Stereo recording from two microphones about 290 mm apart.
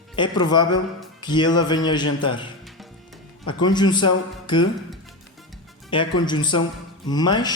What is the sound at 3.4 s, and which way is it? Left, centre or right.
Speech, centre.